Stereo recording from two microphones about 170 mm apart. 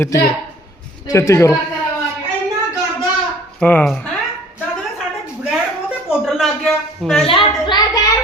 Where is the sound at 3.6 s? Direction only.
10° left (ahead or behind).